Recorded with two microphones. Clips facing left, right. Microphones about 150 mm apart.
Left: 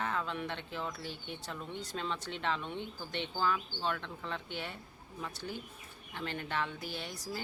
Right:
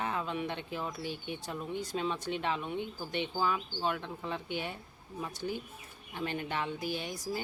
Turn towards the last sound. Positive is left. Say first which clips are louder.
# right 6 dB
turn(degrees=-15)  # may be behind; listen again after turning